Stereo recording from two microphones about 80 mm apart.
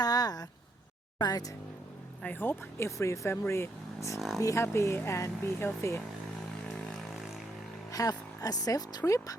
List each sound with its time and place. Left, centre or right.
0.0 s a sound: left
1.2 s speech: left
2.2 s speech: left
6.7 s vehicle: centre
7.9 s speech: left
9.0 s speech: left